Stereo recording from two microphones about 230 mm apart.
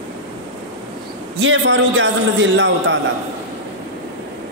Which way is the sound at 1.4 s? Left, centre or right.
Right.